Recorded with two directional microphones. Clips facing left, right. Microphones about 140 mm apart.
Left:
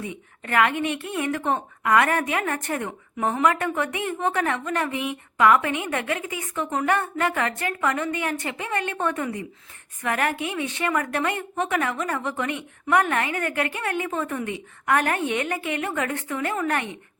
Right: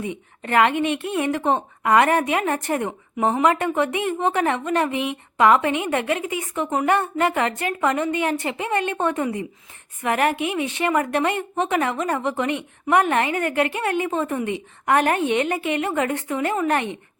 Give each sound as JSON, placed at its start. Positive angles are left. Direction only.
{"t": 0.0, "sound": "a woman's voice", "side_deg": -25}